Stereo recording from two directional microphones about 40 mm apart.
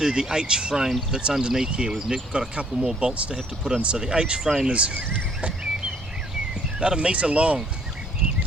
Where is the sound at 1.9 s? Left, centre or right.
Centre.